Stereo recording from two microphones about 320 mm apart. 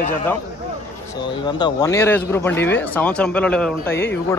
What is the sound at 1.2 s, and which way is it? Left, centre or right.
Speech, centre.